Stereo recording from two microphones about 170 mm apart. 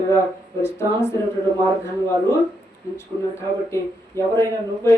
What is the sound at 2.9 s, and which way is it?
Speech, 15° left (ahead or behind).